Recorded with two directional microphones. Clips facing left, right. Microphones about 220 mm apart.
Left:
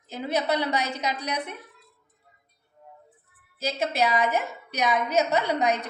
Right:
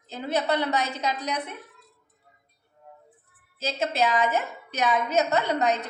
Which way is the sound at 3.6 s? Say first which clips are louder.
Even; 10° left (ahead or behind).